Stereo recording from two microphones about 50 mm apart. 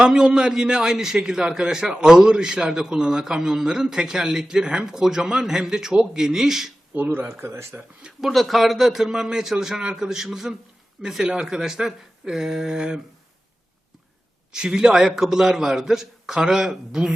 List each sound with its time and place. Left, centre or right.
0.0 s a man's voice: centre
6.9 s speech: right
7.4 s speech: right
8.2 s a man's voice: centre
14.5 s a man's voice: centre